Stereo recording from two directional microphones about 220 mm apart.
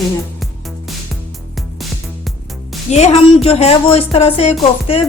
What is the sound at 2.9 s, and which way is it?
Speech, 30° left (ahead or behind).